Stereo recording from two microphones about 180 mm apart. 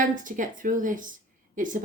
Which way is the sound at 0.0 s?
45° right (ahead or behind).